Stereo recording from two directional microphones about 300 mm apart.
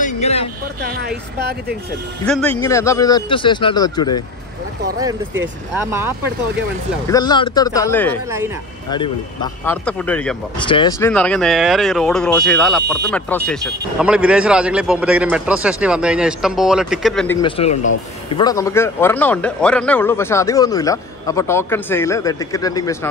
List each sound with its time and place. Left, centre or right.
0.0 s a sound: left
0.8 s speech: right
2.2 s a man's voice: centre
5.9 s speech: centre
7.1 s a man's voice: centre
10.6 s a man's voice: centre
17.4 s a man's voice: centre